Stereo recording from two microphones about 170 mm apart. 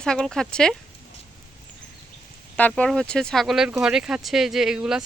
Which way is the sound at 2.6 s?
10° left (ahead or behind).